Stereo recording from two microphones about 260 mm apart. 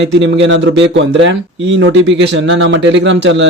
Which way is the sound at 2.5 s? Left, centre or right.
Right.